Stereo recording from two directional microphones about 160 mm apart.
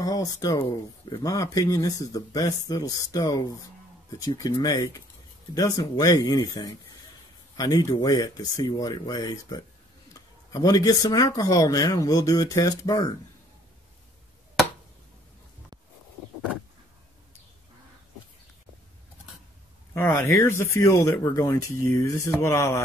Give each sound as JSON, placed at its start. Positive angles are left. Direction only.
{"t": 0.0, "sound": "speech", "side_deg": 20}
{"t": 19.9, "sound": "speech", "side_deg": 15}